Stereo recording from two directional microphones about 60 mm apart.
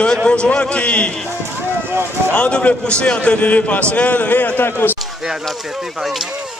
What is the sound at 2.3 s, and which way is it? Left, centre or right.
A man's voice, centre.